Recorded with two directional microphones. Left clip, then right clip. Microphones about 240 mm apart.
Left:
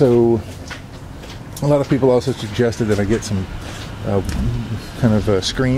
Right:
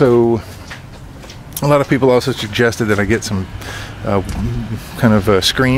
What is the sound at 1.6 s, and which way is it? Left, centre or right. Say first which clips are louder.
Speech: right 3 dB; right.